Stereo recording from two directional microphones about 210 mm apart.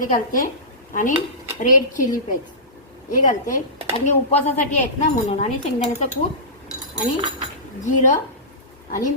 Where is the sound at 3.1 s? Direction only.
40° left (ahead or behind).